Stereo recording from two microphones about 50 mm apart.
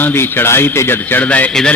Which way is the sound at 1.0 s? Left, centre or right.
Left.